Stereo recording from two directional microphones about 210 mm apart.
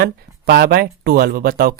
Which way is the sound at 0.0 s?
50° right (ahead or behind).